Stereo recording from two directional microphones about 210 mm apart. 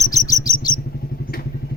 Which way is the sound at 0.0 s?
15° left (ahead or behind).